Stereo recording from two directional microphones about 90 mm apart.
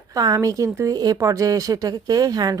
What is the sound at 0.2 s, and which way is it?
Speech, 45° right (ahead or behind).